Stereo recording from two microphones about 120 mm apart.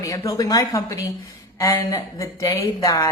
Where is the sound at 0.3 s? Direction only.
30° left (ahead or behind).